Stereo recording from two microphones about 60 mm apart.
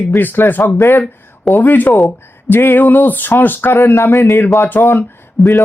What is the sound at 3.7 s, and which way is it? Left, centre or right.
Speech, left.